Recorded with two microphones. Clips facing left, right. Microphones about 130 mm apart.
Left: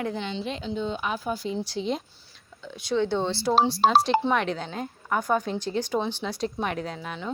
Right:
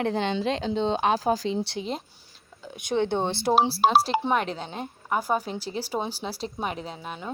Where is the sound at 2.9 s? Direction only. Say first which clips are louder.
Even; 55° right (ahead or behind).